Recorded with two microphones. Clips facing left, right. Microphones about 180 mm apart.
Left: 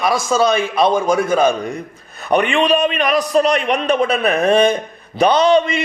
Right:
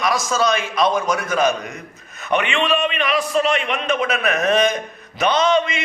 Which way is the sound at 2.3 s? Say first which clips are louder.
Left 5 dB; 40° left (ahead or behind).